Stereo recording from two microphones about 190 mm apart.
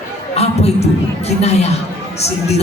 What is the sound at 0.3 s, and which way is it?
A man's voice, 35° left (ahead or behind).